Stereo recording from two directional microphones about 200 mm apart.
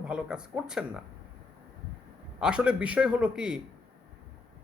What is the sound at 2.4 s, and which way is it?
A man's voice, 5° right (ahead or behind).